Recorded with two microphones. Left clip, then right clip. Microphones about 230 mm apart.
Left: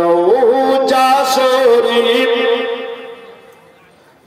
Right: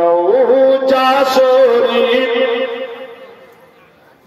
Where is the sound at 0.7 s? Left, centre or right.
Left.